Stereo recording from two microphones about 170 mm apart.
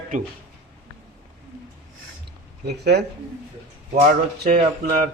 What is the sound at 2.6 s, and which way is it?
Speech, 75° right (ahead or behind).